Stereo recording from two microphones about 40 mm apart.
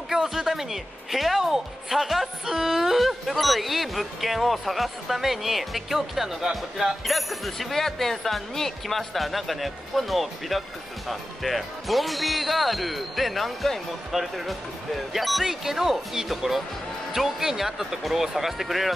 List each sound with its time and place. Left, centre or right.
0.1 s speech: centre